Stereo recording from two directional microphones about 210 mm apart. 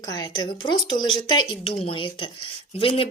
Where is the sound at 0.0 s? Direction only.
20° left (ahead or behind).